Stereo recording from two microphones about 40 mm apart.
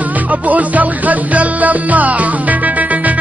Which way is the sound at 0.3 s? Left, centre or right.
Right.